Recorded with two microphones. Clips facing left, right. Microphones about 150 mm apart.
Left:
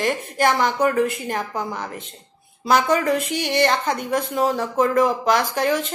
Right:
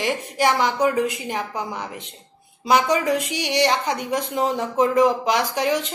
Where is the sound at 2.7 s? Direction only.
15° right (ahead or behind).